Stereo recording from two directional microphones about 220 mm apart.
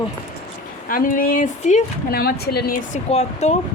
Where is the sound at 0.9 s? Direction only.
40° left (ahead or behind).